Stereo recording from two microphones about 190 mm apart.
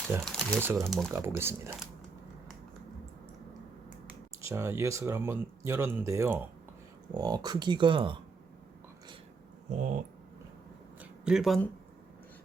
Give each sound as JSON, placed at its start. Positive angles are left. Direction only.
{"t": 0.3, "sound": "speech", "side_deg": 0}
{"t": 0.6, "sound": "speech", "side_deg": -10}
{"t": 0.9, "sound": "speech", "side_deg": 0}
{"t": 1.1, "sound": "speech", "side_deg": -15}
{"t": 4.4, "sound": "speech", "side_deg": -15}
{"t": 9.7, "sound": "speech", "side_deg": -40}
{"t": 11.0, "sound": "speech", "side_deg": -5}